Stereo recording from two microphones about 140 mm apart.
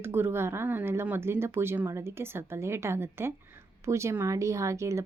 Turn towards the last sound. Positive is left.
turn(degrees=-20)  # may be behind; listen again after turning